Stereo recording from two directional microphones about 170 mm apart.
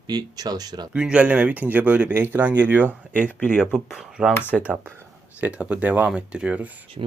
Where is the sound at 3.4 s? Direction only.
10° left (ahead or behind).